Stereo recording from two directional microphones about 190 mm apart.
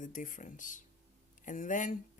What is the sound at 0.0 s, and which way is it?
Speech, 45° left (ahead or behind).